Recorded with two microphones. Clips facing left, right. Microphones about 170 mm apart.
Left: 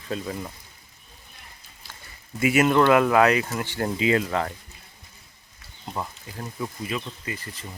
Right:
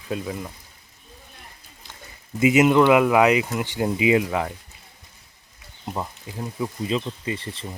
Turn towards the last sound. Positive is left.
turn(degrees=-30)  # may be behind; listen again after turning